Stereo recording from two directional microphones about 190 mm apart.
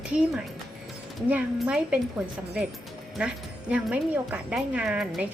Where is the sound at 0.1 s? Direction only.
5° right (ahead or behind).